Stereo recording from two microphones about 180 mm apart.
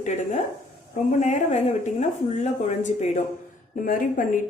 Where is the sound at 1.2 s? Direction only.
40° left (ahead or behind).